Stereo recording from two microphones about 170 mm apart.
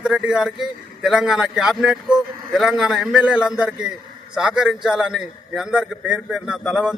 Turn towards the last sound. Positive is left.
turn(degrees=-5)  # may be behind; listen again after turning